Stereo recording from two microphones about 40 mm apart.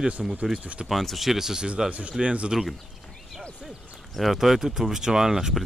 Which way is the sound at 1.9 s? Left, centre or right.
Right.